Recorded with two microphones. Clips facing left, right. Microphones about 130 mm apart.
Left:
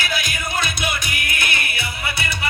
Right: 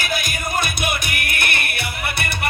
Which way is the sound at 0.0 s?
50° right (ahead or behind).